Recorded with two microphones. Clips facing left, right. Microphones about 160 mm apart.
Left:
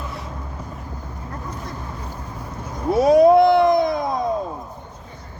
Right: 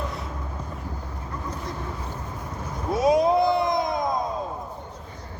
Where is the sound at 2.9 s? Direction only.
65° left (ahead or behind).